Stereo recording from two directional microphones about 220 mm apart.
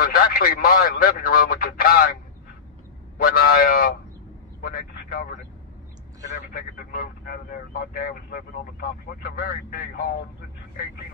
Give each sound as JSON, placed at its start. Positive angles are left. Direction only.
{"t": 0.0, "sound": "speech", "side_deg": 40}
{"t": 3.2, "sound": "a man's voice", "side_deg": 40}
{"t": 6.5, "sound": "speech", "side_deg": 40}